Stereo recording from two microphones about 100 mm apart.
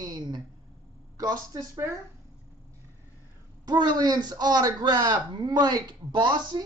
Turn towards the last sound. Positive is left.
turn(degrees=-45)  # may be behind; listen again after turning